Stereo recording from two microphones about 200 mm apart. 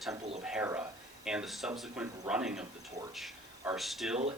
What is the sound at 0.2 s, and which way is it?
Speech, 35° right (ahead or behind).